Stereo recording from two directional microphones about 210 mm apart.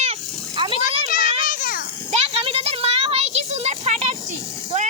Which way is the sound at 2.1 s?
25° right (ahead or behind).